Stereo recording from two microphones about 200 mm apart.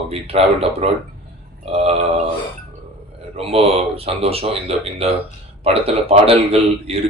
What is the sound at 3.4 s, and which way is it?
Speech, 30° right (ahead or behind).